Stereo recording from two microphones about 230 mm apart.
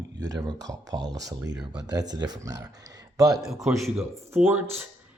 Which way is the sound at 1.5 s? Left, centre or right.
Centre.